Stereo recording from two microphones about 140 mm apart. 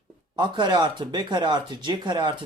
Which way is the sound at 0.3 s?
35° right (ahead or behind).